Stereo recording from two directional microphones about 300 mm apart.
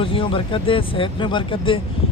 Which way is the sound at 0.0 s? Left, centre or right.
Centre.